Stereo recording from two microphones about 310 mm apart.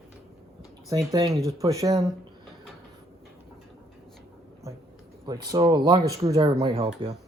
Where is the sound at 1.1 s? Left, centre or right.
Centre.